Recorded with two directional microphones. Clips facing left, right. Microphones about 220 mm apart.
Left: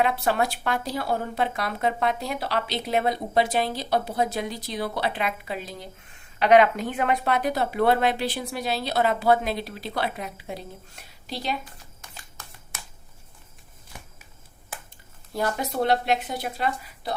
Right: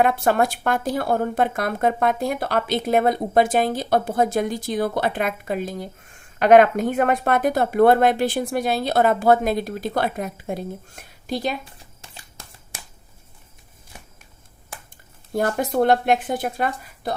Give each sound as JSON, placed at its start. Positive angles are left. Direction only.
{"t": 0.0, "sound": "speech", "side_deg": -50}
{"t": 11.6, "sound": "a sound", "side_deg": -30}
{"t": 15.3, "sound": "speech", "side_deg": -50}